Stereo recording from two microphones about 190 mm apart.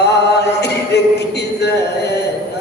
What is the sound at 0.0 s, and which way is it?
A capella, 60° left (ahead or behind).